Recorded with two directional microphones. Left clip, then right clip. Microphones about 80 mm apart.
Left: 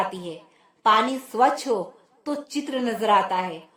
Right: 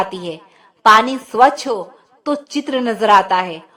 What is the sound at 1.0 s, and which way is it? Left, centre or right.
A woman's voice, right.